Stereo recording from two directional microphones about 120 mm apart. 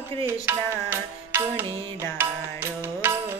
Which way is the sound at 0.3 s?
20° right (ahead or behind).